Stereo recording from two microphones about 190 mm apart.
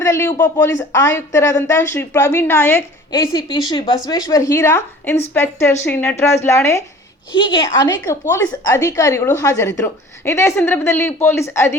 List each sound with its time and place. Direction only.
0.0 s speech: 15° left (ahead or behind)
7.3 s speech: 25° left (ahead or behind)